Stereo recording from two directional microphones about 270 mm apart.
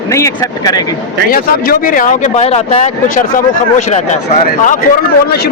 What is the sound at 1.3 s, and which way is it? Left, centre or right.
Speech, left.